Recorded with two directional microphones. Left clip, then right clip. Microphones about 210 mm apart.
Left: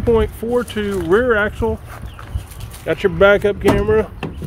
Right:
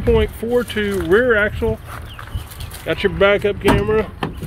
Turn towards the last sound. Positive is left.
turn(degrees=20)  # may be behind; listen again after turning